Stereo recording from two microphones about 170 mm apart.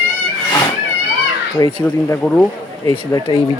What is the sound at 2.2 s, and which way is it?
Speech, 10° left (ahead or behind).